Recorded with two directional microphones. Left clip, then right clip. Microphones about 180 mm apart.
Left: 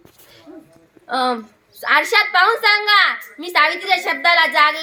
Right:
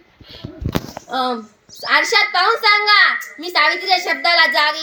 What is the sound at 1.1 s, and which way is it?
A woman's voice, 10° right (ahead or behind).